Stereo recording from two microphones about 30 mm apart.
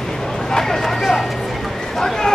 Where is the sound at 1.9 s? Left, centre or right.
Centre.